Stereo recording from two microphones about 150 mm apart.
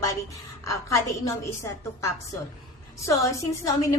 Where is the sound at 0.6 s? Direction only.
20° left (ahead or behind).